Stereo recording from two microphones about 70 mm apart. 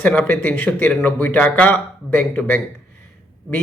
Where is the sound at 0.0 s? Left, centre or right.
Left.